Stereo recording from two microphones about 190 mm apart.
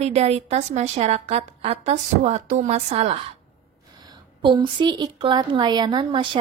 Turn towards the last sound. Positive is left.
turn(degrees=-25)  # may be behind; listen again after turning